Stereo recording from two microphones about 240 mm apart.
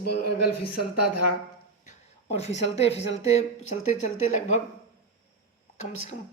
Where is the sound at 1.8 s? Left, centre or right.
Left.